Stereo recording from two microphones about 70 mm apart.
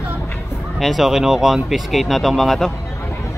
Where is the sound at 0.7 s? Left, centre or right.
Centre.